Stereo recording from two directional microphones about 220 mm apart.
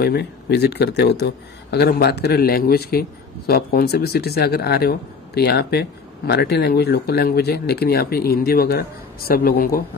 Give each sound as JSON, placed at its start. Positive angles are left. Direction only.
{"t": 0.0, "sound": "speech", "side_deg": 50}